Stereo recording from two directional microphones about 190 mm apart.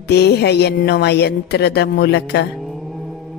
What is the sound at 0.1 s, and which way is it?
A woman's voice, 60° left (ahead or behind).